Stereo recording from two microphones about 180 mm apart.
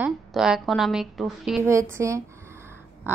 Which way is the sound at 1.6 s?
15° right (ahead or behind).